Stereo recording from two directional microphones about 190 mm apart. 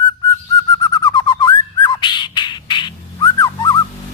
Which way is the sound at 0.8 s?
20° left (ahead or behind).